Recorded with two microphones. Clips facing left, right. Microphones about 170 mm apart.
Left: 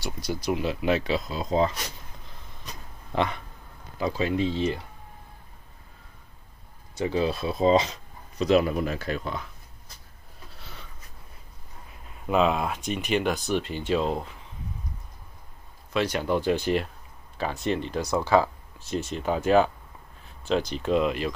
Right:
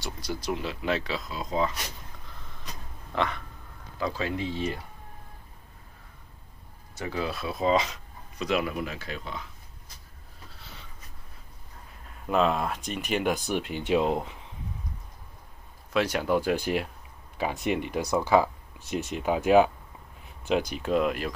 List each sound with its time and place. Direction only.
0.0 s speech: 15° left (ahead or behind)
1.3 s speech: 30° left (ahead or behind)
3.1 s speech: 20° left (ahead or behind)
7.0 s speech: 25° left (ahead or behind); by 9.4 s 50° left (ahead or behind)
12.3 s speech: 5° left (ahead or behind); by 14.3 s 15° right (ahead or behind)
15.9 s speech: 5° right (ahead or behind)